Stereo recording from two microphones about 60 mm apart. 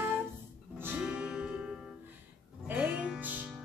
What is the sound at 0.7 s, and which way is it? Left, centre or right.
Music, right.